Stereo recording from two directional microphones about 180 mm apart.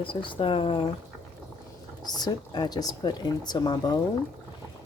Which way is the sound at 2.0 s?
20° left (ahead or behind).